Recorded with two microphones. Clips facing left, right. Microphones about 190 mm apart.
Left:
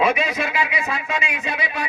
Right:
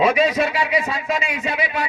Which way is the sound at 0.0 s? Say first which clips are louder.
Right 4 dB; 30° right (ahead or behind).